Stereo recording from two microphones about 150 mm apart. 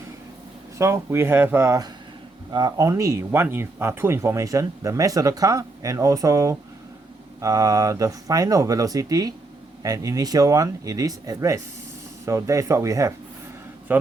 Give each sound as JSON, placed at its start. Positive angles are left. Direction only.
{"t": 0.8, "sound": "speech", "side_deg": -20}